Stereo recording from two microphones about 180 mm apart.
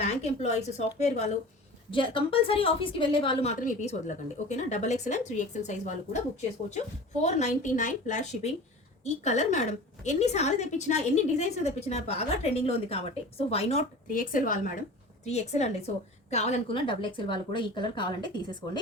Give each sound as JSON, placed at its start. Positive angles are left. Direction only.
{"t": 0.0, "sound": "a woman's voice", "side_deg": 40}
{"t": 3.6, "sound": "a woman's voice", "side_deg": 45}
{"t": 14.1, "sound": "a woman's voice", "side_deg": 50}
{"t": 15.2, "sound": "a woman's voice", "side_deg": 35}